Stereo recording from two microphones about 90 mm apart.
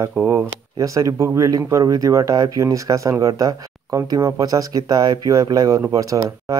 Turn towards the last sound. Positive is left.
turn(degrees=-40)  # may be behind; listen again after turning